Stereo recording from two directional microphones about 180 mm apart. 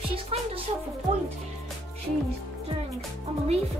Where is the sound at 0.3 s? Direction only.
35° right (ahead or behind).